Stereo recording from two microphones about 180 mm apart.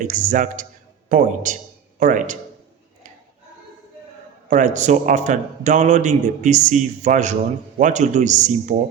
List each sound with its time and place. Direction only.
0.0 s a man's voice: 45° right (ahead or behind)
4.4 s a man's voice: 45° right (ahead or behind)